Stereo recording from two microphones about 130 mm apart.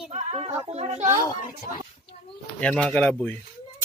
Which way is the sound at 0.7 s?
60° right (ahead or behind).